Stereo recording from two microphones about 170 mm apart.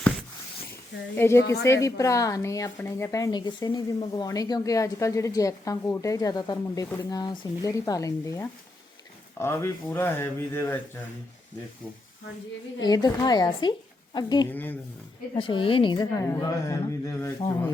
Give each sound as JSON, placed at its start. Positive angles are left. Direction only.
{"t": 1.1, "sound": "speech", "side_deg": 15}
{"t": 1.4, "sound": "a woman's voice", "side_deg": 90}
{"t": 1.6, "sound": "a woman's voice", "side_deg": 15}
{"t": 12.8, "sound": "a woman's voice", "side_deg": 25}
{"t": 14.5, "sound": "speech", "side_deg": 10}
{"t": 15.4, "sound": "a woman's voice", "side_deg": 30}